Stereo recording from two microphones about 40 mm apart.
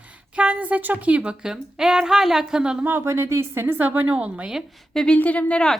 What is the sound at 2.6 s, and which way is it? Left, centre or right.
Speech, right.